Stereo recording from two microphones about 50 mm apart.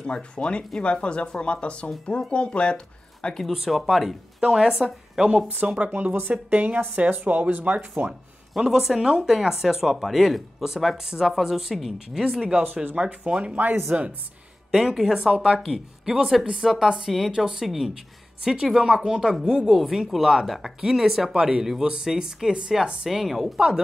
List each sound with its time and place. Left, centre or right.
0.0 s speech: centre
3.4 s speech: centre
5.6 s speech: right
5.9 s speech: right
8.1 s speech: centre
12.6 s speech: right
12.9 s speech: centre
14.7 s speech: centre
15.1 s speech: centre
23.0 s speech: centre